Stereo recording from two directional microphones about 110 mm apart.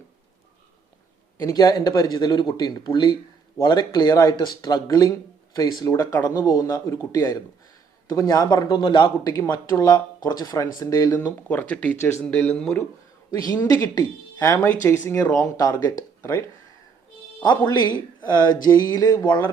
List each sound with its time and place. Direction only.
1.4 s speech: 30° left (ahead or behind)
6.1 s speech: 20° left (ahead or behind)
6.4 s speech: 30° left (ahead or behind)
9.5 s speech: 30° left (ahead or behind)
11.3 s speech: 15° left (ahead or behind)
11.9 s speech: 25° left (ahead or behind)
12.2 s speech: 10° left (ahead or behind)
13.4 s speech: 30° left (ahead or behind)
17.8 s speech: 40° left (ahead or behind)